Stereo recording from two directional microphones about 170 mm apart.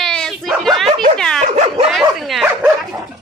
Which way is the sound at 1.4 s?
40° right (ahead or behind).